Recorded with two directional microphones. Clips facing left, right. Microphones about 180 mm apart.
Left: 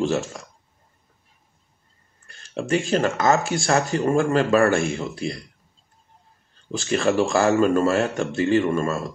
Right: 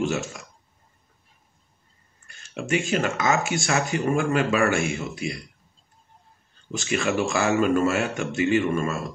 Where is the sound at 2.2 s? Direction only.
35° left (ahead or behind).